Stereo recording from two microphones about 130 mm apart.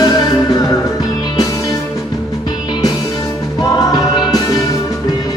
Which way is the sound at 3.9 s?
30° left (ahead or behind).